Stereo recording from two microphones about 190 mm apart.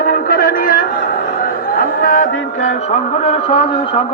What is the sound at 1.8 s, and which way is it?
Music, 45° left (ahead or behind).